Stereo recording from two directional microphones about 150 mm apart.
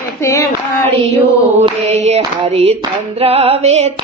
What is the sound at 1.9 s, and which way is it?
Female singing, 45° right (ahead or behind).